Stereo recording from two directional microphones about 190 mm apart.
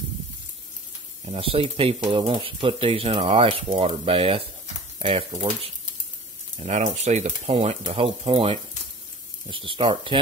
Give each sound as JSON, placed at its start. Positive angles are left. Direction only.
{"t": 1.2, "sound": "speech", "side_deg": -30}